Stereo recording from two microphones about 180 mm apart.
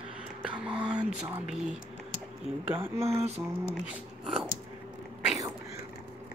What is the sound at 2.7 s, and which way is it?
Speech, 15° right (ahead or behind).